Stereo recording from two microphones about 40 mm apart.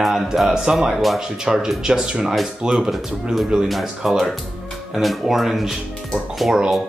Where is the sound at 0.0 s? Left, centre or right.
Centre.